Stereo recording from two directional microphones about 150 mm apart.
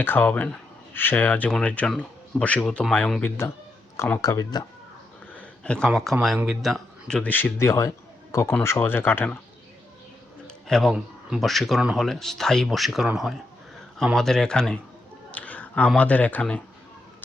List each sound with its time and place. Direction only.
0.0 s speech: 10° left (ahead or behind)
5.3 s a sound: 10° left (ahead or behind)
6.3 s speech: 10° right (ahead or behind)
6.6 s a man's voice: centre (ahead or behind)
10.4 s speech: centre (ahead or behind)
15.3 s a sound: 10° left (ahead or behind)
15.9 s speech: 10° left (ahead or behind)